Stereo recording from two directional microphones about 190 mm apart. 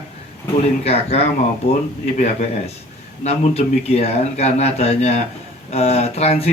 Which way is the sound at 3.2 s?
35° left (ahead or behind).